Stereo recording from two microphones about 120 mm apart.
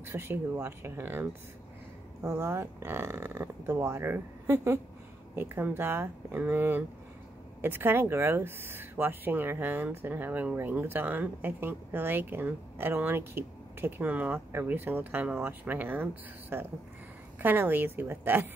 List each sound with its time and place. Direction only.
0.0 s speech: 20° right (ahead or behind)